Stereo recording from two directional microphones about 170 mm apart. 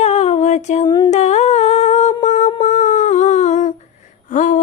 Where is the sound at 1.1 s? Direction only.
40° left (ahead or behind).